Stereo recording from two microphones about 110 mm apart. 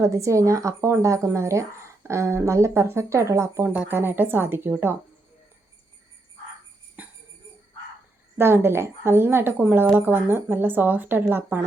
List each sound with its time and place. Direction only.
0.0 s a woman's voice: 30° right (ahead or behind)
7.0 s music: 15° right (ahead or behind)
8.4 s a woman's voice: 20° right (ahead or behind)